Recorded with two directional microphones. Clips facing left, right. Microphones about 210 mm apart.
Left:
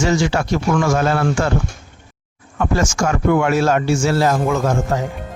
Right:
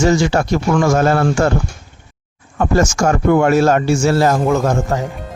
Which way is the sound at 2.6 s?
45° right (ahead or behind).